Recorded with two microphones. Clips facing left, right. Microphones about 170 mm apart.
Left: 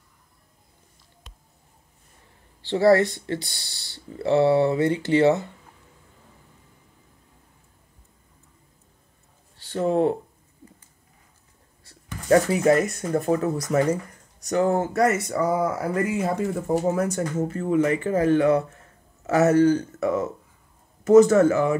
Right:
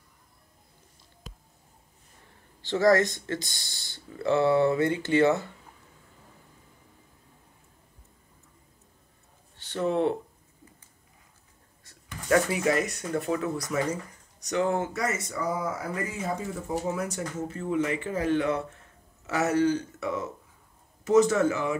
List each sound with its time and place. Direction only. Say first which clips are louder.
1.3 s squish: right 7 dB; centre (ahead or behind)
2.7 s speech: left 4 dB; 30° left (ahead or behind)
9.6 s speech: left 4 dB; 35° left (ahead or behind)
11.8 s speech: left 4 dB; 35° left (ahead or behind)
15.0 s speech: left 9 dB; 60° left (ahead or behind)